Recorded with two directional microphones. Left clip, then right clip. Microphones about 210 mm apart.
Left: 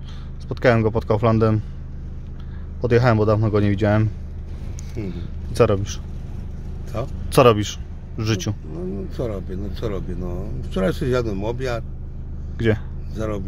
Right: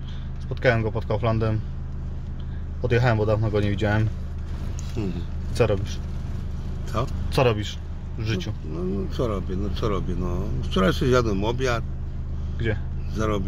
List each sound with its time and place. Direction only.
0.5 s speech: 45° left (ahead or behind)
2.8 s a man's voice: 40° left (ahead or behind)
5.0 s speech: 5° left (ahead or behind)
5.5 s a man's voice: 40° left (ahead or behind)
6.9 s speech: 10° left (ahead or behind)
7.3 s speech: 50° left (ahead or behind)
8.7 s speech: 15° left (ahead or behind)
12.5 s a man's voice: 50° left (ahead or behind)
13.1 s speech: 10° left (ahead or behind)